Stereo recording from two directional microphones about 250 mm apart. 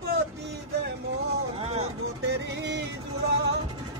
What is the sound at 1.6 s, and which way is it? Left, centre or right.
Speech, right.